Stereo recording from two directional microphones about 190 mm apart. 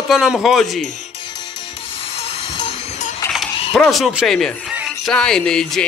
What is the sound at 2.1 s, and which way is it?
Hiss, 30° left (ahead or behind).